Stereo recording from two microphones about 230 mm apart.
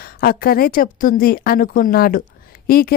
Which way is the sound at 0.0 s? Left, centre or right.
Left.